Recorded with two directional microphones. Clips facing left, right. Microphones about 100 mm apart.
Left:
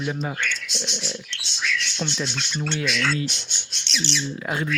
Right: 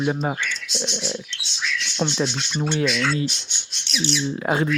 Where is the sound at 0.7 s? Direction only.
65° right (ahead or behind).